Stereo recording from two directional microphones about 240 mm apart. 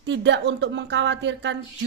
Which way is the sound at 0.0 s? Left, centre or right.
Right.